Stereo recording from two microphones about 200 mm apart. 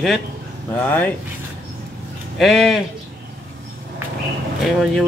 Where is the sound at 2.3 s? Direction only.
Centre (ahead or behind).